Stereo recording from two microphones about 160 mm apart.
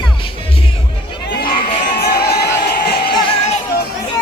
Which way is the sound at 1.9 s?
85° left.